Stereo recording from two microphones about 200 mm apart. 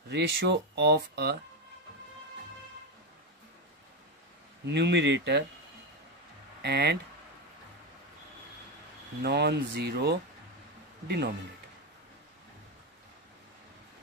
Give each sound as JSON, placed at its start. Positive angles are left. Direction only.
{"t": 0.1, "sound": "speech", "side_deg": -55}
{"t": 4.6, "sound": "speech", "side_deg": -60}
{"t": 6.6, "sound": "speech", "side_deg": -55}
{"t": 9.2, "sound": "speech", "side_deg": -55}